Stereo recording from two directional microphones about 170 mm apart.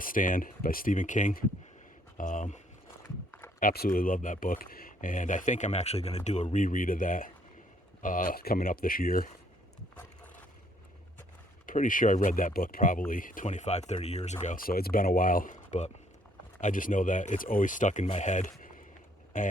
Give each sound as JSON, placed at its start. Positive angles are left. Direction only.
{"t": 0.0, "sound": "speech", "side_deg": 55}
{"t": 3.6, "sound": "speech", "side_deg": 60}
{"t": 11.6, "sound": "speech", "side_deg": 50}
{"t": 14.4, "sound": "speech", "side_deg": 55}